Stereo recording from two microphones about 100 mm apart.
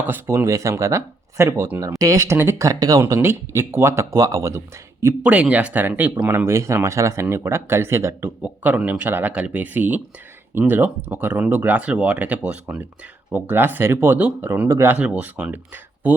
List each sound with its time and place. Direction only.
0.1 s speech: 25° right (ahead or behind)
3.0 s speech: 25° right (ahead or behind)
5.2 s speech: 10° right (ahead or behind)
8.4 s speech: 10° right (ahead or behind)
14.9 s speech: 10° right (ahead or behind)